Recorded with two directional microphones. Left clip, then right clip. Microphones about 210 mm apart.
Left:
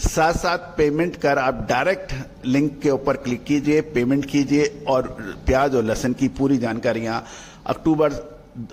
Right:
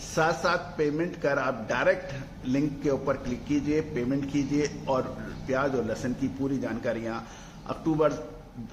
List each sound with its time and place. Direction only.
0.1 s a man's voice: 50° left (ahead or behind)